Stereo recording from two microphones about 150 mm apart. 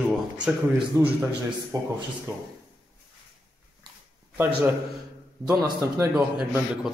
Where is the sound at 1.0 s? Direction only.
20° right (ahead or behind).